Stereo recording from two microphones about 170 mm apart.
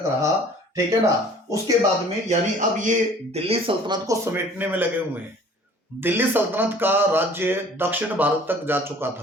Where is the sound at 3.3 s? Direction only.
35° right (ahead or behind); by 4.9 s 10° right (ahead or behind).